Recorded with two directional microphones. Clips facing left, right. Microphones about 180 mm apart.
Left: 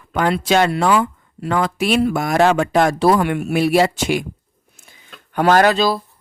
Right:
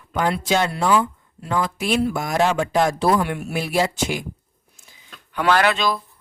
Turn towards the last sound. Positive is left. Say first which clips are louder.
# left 5 dB
turn(degrees=35)  # may be behind; listen again after turning